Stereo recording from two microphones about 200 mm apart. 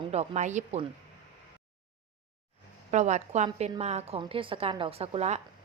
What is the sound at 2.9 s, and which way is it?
A woman's voice, 35° right (ahead or behind).